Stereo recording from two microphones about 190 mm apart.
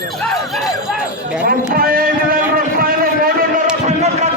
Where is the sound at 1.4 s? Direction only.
50° right (ahead or behind).